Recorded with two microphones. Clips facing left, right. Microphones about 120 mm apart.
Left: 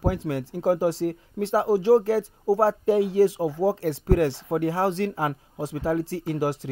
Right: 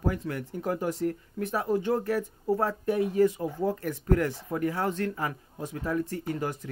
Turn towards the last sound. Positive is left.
turn(degrees=90)